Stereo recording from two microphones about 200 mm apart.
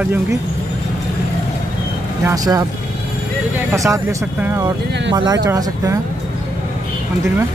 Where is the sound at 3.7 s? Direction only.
15° right (ahead or behind).